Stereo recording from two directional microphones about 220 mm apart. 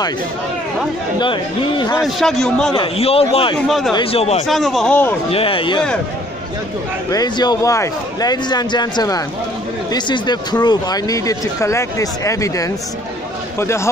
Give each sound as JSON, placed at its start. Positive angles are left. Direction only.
{"t": 1.2, "sound": "a man's voice", "side_deg": 20}
{"t": 2.0, "sound": "a man's voice", "side_deg": 0}
{"t": 2.7, "sound": "a man's voice", "side_deg": 25}
{"t": 3.6, "sound": "a man's voice", "side_deg": 0}
{"t": 3.9, "sound": "a man's voice", "side_deg": 25}
{"t": 4.5, "sound": "a man's voice", "side_deg": 0}
{"t": 5.3, "sound": "a man's voice", "side_deg": 25}
{"t": 7.1, "sound": "speech", "side_deg": 20}